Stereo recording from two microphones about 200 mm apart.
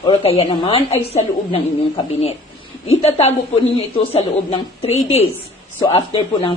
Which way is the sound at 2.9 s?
30° left (ahead or behind).